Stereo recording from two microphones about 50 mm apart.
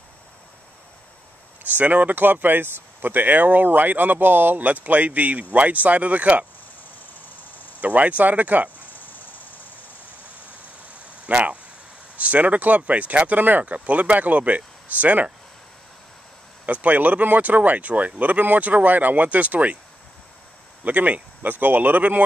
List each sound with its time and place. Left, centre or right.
1.8 s speech: right
7.8 s speech: right
8.7 s a sound: left
11.2 s speech: right
16.6 s speech: right
20.8 s speech: right